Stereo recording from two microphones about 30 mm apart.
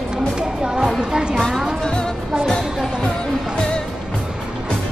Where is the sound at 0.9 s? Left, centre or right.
Centre.